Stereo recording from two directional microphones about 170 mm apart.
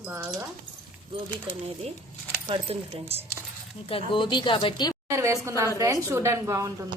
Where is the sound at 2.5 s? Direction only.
35° right (ahead or behind).